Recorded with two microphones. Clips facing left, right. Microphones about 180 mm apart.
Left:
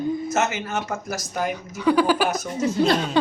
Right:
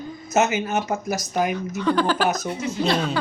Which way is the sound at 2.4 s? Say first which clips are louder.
Left 3 dB; 40° left (ahead or behind).